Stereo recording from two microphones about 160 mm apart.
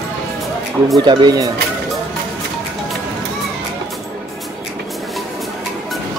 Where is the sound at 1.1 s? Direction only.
25° right (ahead or behind).